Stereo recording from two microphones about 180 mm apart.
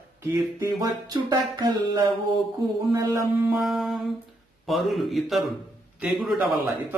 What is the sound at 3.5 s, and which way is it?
Mantra, centre (ahead or behind).